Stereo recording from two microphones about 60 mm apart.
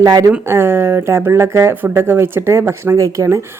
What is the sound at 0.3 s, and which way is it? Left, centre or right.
Speech, right.